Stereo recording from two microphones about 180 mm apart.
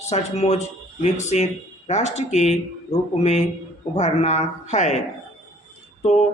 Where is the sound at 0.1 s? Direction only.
35° left (ahead or behind).